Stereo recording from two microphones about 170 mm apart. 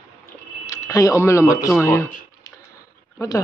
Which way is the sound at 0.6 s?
20° left (ahead or behind).